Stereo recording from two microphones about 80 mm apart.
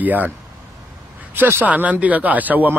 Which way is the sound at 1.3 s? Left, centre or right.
Right.